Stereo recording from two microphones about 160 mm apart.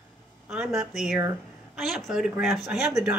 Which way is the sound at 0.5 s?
5° right (ahead or behind).